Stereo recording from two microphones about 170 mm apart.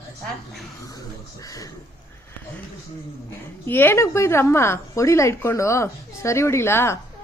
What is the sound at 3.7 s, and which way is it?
A woman's voice, 10° left (ahead or behind).